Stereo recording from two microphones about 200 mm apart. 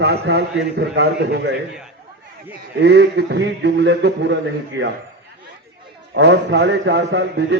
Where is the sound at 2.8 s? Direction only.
60° right (ahead or behind).